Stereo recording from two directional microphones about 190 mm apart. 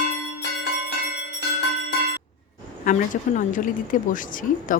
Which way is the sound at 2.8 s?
45° left (ahead or behind).